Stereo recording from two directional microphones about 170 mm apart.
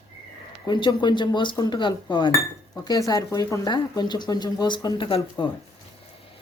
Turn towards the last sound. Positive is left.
turn(degrees=30)  # may be behind; listen again after turning